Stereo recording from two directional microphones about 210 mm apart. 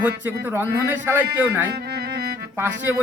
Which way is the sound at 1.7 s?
50° right (ahead or behind).